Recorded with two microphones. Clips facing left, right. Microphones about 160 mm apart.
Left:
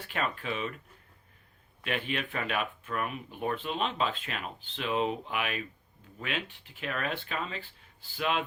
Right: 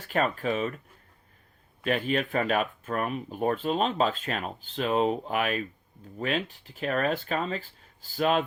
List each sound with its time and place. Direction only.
0.1 s speech: 45° right (ahead or behind)
1.8 s speech: 40° right (ahead or behind)